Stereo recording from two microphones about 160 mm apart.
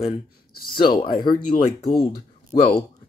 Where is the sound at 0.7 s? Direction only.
30° left (ahead or behind).